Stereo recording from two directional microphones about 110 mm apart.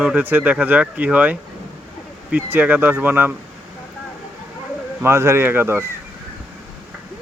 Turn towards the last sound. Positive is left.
turn(degrees=-20)  # may be behind; listen again after turning